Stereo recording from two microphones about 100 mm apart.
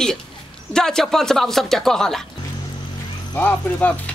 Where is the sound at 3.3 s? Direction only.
15° left (ahead or behind).